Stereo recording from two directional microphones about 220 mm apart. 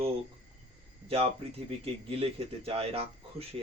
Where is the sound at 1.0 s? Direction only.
25° right (ahead or behind).